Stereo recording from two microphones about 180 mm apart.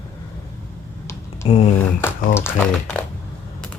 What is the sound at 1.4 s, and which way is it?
Speech, 35° left (ahead or behind).